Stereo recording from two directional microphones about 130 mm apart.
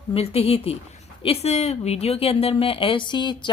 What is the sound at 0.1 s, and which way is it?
A woman's voice, 50° left (ahead or behind).